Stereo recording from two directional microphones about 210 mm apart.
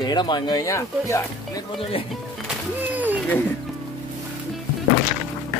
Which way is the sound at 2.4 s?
10° right (ahead or behind).